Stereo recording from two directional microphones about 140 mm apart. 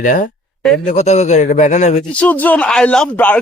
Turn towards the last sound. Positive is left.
turn(degrees=10)  # may be behind; listen again after turning